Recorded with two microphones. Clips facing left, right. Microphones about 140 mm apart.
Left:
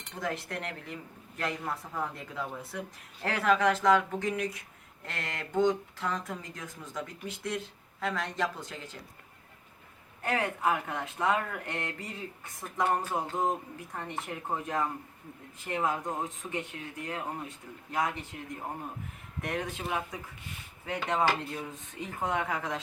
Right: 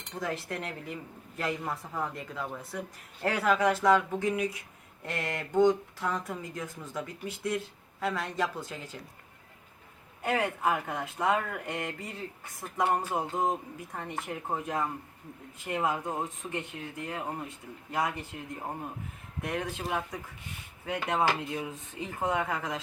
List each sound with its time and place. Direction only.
0.2 s speech: centre (ahead or behind)
10.2 s speech: 5° right (ahead or behind)